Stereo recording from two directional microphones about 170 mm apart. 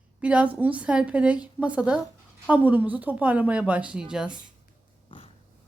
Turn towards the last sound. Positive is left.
turn(degrees=35)  # may be behind; listen again after turning